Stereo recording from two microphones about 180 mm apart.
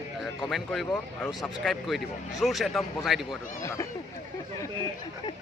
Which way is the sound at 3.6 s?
15° left (ahead or behind).